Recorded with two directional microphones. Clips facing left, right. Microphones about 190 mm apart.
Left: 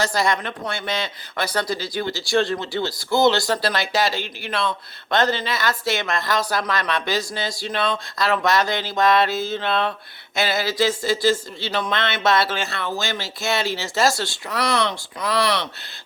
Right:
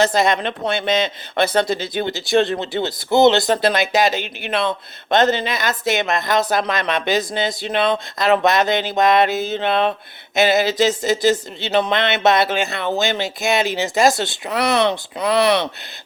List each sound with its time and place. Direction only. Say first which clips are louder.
0.0 s speech: right 5 dB; 20° right (ahead or behind)